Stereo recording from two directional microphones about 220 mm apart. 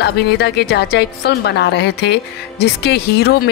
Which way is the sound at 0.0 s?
50° left (ahead or behind).